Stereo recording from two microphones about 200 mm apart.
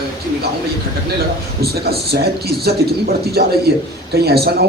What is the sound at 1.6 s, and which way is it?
Speech, 50° right (ahead or behind).